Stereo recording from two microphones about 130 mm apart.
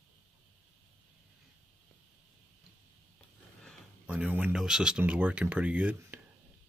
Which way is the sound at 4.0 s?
10° right (ahead or behind).